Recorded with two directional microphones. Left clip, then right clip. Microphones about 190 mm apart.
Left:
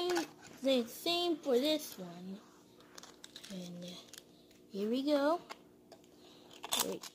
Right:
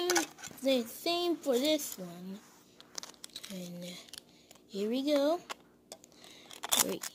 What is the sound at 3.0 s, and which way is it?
Crumpling, 55° right (ahead or behind).